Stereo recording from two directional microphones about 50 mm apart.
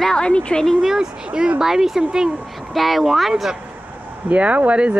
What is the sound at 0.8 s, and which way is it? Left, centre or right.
Speech, centre.